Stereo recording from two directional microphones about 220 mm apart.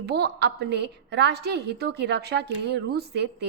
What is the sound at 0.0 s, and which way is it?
A woman's voice, 50° right (ahead or behind).